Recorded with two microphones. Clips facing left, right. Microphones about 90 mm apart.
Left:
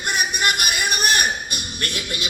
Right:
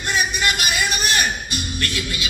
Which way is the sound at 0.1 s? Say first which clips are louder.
Right 1 dB; 55° left (ahead or behind).